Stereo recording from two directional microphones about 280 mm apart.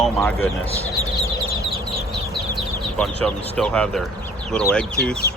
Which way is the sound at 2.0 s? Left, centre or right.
Centre.